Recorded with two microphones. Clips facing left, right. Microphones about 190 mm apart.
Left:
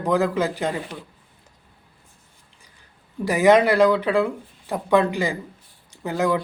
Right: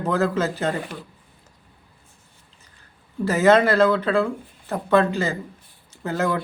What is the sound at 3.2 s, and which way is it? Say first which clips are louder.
Speech: left 1 dB; 15° left (ahead or behind).